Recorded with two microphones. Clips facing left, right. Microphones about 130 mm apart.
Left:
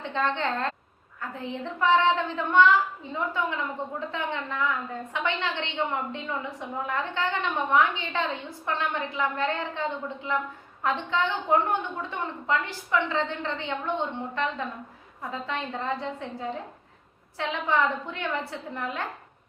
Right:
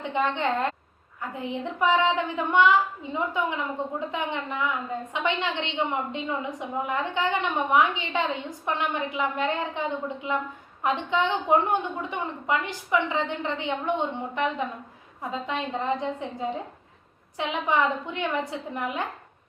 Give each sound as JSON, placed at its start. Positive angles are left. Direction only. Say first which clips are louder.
{"t": 0.0, "sound": "a woman's voice", "louder": "right 2 dB", "side_deg": -15}